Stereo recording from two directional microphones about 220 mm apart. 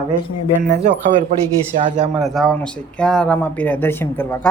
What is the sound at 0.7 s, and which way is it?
Speech, 35° right (ahead or behind).